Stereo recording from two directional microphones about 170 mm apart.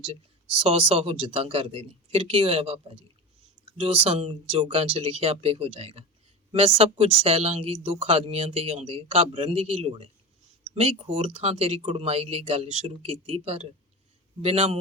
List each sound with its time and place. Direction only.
0.5 s speech: 35° right (ahead or behind)